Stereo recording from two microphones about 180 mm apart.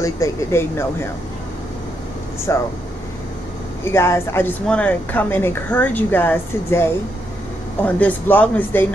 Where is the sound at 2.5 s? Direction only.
15° left (ahead or behind).